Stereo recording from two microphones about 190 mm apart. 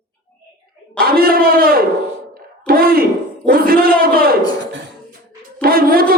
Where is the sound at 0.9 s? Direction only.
50° right (ahead or behind).